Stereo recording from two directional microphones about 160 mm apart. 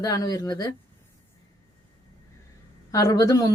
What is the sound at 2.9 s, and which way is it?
Speech, 20° left (ahead or behind).